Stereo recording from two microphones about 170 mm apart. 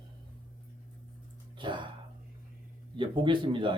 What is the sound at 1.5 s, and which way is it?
Speech, 30° right (ahead or behind).